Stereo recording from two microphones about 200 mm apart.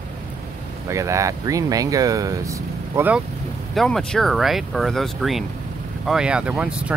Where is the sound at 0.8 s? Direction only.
15° right (ahead or behind).